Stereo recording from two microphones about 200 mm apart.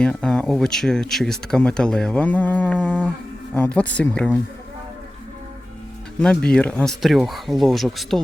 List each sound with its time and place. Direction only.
0.0 s speech: 5° left (ahead or behind)
6.1 s speech: 5° left (ahead or behind)